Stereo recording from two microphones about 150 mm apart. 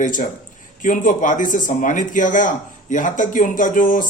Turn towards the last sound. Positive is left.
turn(degrees=60)  # may be behind; listen again after turning